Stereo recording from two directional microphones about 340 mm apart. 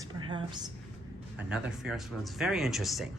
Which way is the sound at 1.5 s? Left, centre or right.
Centre.